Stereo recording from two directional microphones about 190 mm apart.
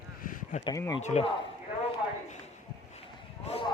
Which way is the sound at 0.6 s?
20° left (ahead or behind).